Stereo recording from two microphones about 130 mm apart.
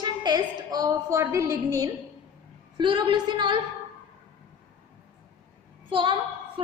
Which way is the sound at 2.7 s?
40° right (ahead or behind).